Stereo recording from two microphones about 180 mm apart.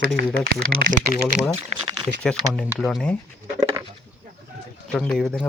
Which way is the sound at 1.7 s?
40° right (ahead or behind).